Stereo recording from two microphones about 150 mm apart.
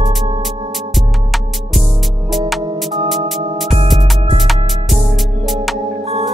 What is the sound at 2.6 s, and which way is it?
Music, 30° right (ahead or behind).